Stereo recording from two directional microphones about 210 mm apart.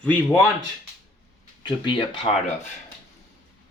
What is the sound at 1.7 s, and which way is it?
Speech, 20° left (ahead or behind).